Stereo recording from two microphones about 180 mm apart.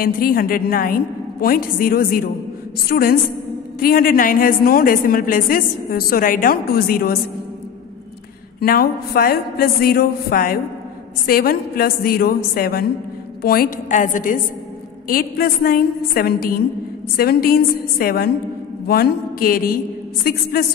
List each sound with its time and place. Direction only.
0.0 s a woman's voice: 55° left (ahead or behind)
8.5 s a woman's voice: 55° left (ahead or behind)